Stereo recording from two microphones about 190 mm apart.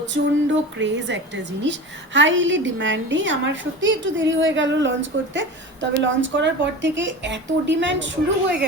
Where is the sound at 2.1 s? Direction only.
75° right (ahead or behind).